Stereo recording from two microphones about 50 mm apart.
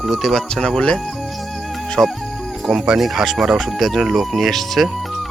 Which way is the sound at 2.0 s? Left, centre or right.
Right.